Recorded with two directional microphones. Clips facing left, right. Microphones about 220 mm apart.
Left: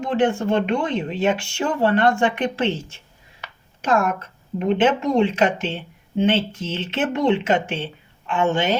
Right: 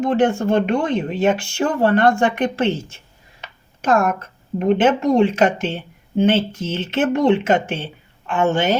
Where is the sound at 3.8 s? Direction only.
45° right (ahead or behind).